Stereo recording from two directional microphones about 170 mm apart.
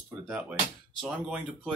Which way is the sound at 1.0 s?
5° right (ahead or behind).